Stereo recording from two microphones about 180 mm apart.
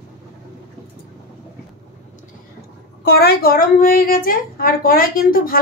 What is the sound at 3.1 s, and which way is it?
A woman's voice, 60° left (ahead or behind).